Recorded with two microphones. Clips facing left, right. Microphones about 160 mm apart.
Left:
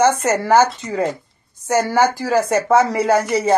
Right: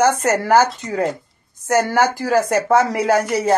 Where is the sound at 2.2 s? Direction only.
5° right (ahead or behind).